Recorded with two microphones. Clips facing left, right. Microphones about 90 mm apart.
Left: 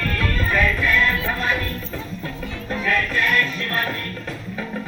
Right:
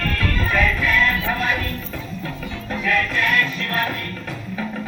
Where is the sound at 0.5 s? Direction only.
20° left (ahead or behind).